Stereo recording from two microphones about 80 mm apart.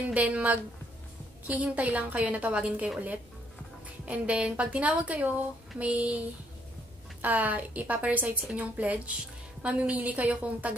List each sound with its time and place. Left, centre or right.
0.1 s a woman's voice: centre
4.0 s a woman's voice: centre